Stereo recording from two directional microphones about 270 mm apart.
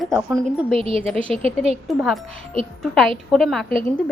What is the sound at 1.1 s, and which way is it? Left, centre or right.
Speech, right.